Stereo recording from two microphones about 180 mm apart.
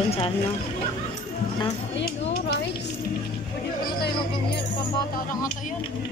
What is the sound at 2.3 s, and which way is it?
Speech, 65° left (ahead or behind).